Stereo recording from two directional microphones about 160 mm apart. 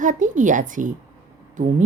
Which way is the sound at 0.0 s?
50° right (ahead or behind).